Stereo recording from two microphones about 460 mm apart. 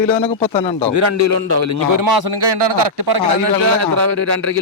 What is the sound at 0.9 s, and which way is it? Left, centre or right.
Speech, right.